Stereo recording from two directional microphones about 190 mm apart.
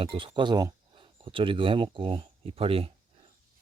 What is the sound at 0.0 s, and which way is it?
Speech, 30° right (ahead or behind).